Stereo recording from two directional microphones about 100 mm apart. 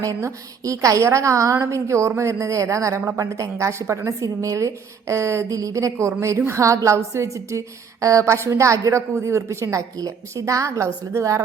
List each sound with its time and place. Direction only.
0.0 s a woman's voice: 30° right (ahead or behind)